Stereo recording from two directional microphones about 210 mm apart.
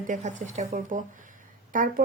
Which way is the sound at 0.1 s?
35° right (ahead or behind).